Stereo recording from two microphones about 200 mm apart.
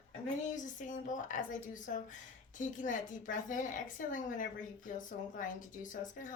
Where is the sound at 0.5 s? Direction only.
40° left (ahead or behind).